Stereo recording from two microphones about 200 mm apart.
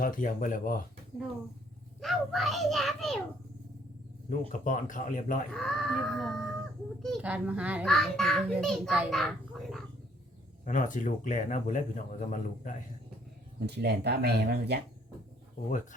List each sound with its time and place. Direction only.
0.0 s speech: 40° left (ahead or behind)
2.0 s a child's voice: centre (ahead or behind)
4.3 s a man's voice: 40° left (ahead or behind)
5.5 s a child's voice: centre (ahead or behind)
10.7 s a man's voice: 40° left (ahead or behind)
13.7 s speech: 55° right (ahead or behind)